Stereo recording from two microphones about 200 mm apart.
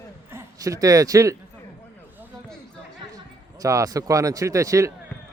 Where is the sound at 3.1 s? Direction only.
15° right (ahead or behind).